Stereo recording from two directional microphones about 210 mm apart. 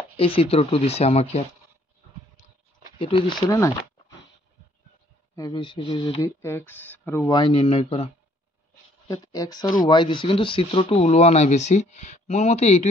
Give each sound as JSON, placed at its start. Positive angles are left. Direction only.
{"t": 0.2, "sound": "speech", "side_deg": 25}
{"t": 3.0, "sound": "speech", "side_deg": 25}
{"t": 5.3, "sound": "speech", "side_deg": 20}